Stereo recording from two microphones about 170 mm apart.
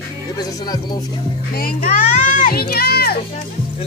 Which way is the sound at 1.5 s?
60° left (ahead or behind).